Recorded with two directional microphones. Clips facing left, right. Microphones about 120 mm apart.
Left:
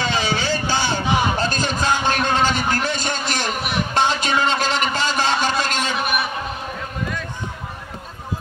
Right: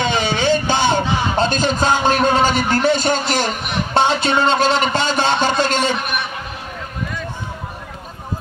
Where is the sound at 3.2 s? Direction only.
Centre (ahead or behind).